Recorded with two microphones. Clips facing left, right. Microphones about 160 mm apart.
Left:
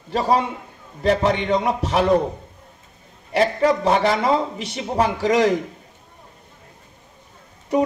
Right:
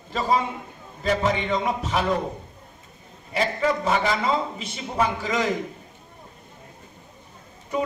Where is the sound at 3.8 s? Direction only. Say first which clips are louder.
Left 5 dB; 40° left (ahead or behind).